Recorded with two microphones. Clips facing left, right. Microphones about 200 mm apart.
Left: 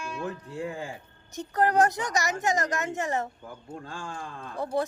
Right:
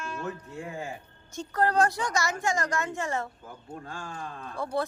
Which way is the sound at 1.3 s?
20° left (ahead or behind).